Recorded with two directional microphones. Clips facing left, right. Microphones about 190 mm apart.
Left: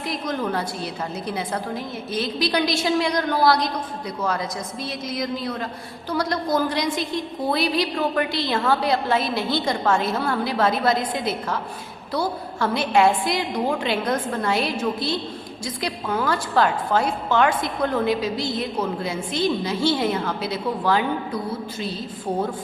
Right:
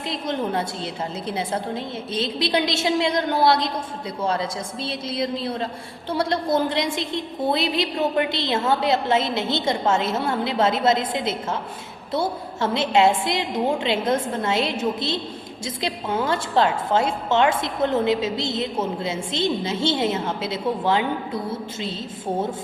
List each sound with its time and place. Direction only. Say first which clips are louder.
0.0 s a woman's voice: even; 25° right (ahead or behind)